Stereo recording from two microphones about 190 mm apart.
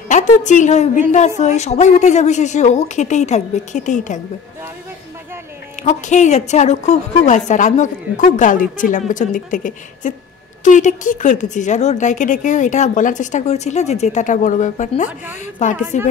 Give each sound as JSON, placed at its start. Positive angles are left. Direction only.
{"t": 0.1, "sound": "a woman's voice", "side_deg": 40}
{"t": 5.9, "sound": "a woman's voice", "side_deg": 40}